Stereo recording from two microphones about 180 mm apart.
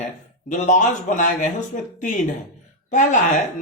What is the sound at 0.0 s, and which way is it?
Speech, 45° left (ahead or behind).